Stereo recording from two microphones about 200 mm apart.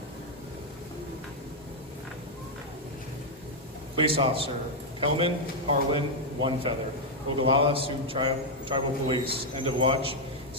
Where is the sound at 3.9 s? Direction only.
25° right (ahead or behind).